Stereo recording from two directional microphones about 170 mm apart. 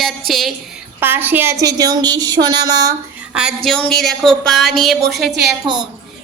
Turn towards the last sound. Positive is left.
turn(degrees=-30)  # may be behind; listen again after turning